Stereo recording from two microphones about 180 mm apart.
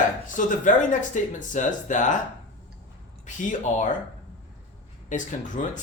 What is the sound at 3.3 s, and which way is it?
Speech, 45° left (ahead or behind).